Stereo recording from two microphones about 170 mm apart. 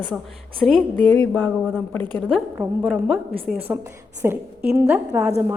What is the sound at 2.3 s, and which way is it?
A woman's voice, 5° right (ahead or behind).